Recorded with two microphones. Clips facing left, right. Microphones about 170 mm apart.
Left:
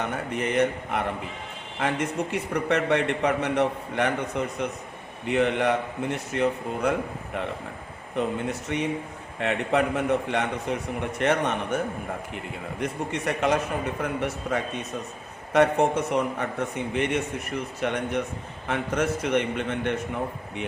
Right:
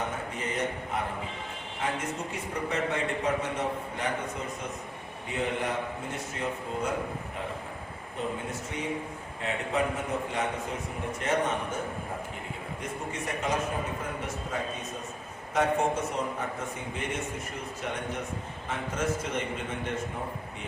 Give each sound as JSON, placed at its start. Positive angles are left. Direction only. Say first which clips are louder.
{"t": 0.3, "sound": "a man's voice", "louder": "left 10 dB", "side_deg": 70}
{"t": 8.7, "sound": "a man's voice", "louder": "left 5 dB", "side_deg": 75}
{"t": 12.8, "sound": "a man's voice", "louder": "left 8 dB", "side_deg": 70}